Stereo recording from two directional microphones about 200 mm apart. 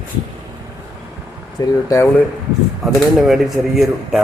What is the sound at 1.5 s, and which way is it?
Speech, 15° left (ahead or behind).